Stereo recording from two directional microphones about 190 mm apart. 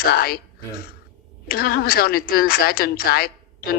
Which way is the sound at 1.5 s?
55° left (ahead or behind).